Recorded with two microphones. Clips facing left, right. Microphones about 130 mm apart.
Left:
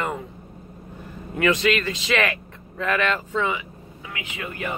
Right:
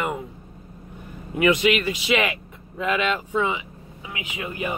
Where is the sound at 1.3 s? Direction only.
15° right (ahead or behind).